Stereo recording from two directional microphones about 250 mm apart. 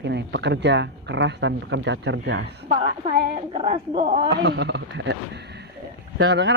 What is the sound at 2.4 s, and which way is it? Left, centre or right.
A woman's voice, right.